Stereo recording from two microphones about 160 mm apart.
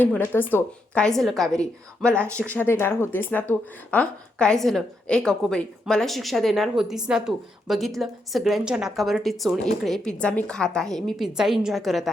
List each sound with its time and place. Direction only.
0.0 s a woman's voice: 10° left (ahead or behind)